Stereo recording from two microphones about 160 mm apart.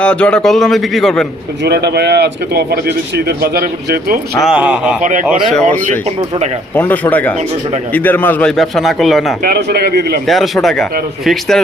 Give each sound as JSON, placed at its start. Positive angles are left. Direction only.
{"t": 0.0, "sound": "a man's voice", "side_deg": 5}
{"t": 1.6, "sound": "speech", "side_deg": -90}
{"t": 4.4, "sound": "speech", "side_deg": -5}
{"t": 6.7, "sound": "a man's voice", "side_deg": 10}
{"t": 9.4, "sound": "speech", "side_deg": -80}
{"t": 10.2, "sound": "a man's voice", "side_deg": 0}